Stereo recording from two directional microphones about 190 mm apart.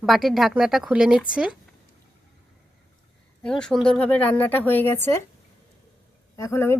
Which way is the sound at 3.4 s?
5° left (ahead or behind).